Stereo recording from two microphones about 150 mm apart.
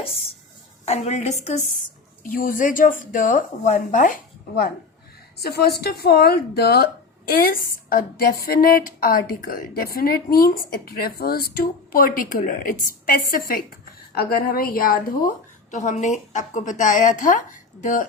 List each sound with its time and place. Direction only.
0.0 s a sound: 40° left (ahead or behind)
0.9 s a woman's voice: 45° left (ahead or behind)
2.2 s a woman's voice: 70° left (ahead or behind)
5.4 s a woman's voice: 90° left; by 15.3 s 70° left (ahead or behind)
15.7 s a woman's voice: 55° left (ahead or behind)